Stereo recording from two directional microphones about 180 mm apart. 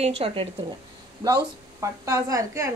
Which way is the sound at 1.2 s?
20° right (ahead or behind).